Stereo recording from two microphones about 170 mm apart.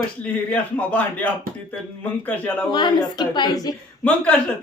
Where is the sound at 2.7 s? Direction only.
25° left (ahead or behind).